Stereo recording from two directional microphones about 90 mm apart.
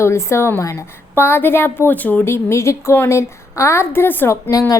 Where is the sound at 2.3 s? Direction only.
30° left (ahead or behind).